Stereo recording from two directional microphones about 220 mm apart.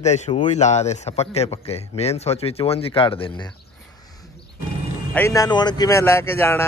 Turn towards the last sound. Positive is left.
turn(degrees=10)  # may be behind; listen again after turning